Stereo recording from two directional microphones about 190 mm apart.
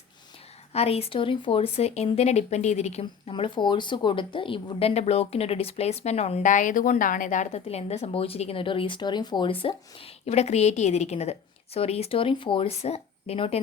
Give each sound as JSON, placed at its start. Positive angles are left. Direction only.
{"t": 0.7, "sound": "speech", "side_deg": 30}